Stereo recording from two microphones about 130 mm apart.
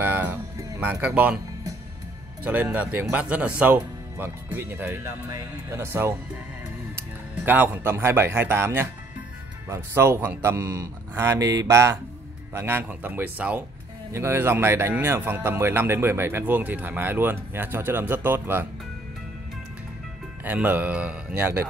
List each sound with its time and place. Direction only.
0.0 s music: 15° right (ahead or behind)
0.7 s speech: 10° right (ahead or behind)
2.4 s speech: 15° right (ahead or behind)
20.4 s speech: 10° right (ahead or behind)